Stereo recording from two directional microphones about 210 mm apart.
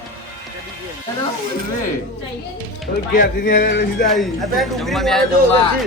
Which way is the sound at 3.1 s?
50° left (ahead or behind).